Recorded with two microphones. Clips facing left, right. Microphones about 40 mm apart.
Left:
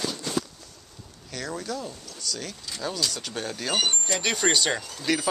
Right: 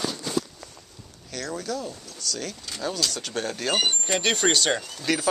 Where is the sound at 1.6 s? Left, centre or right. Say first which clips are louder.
Right 2 dB; left.